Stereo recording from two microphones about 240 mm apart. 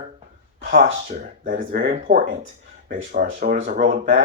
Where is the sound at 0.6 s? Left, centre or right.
Right.